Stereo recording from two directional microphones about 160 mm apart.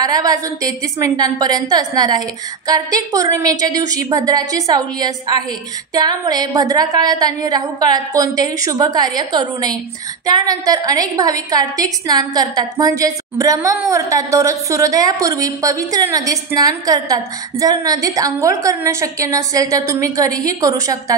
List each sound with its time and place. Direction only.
0.0 s a woman's voice: 25° right (ahead or behind)